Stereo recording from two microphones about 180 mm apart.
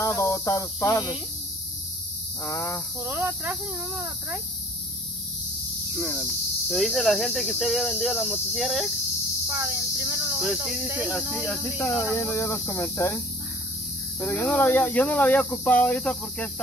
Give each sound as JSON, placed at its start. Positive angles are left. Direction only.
{"t": 0.0, "sound": "speech", "side_deg": 15}
{"t": 2.4, "sound": "speech", "side_deg": 15}
{"t": 3.0, "sound": "cricket", "side_deg": -10}
{"t": 5.9, "sound": "cricket", "side_deg": 0}
{"t": 9.5, "sound": "cricket", "side_deg": -15}
{"t": 12.1, "sound": "speech", "side_deg": 15}
{"t": 14.2, "sound": "speech", "side_deg": 5}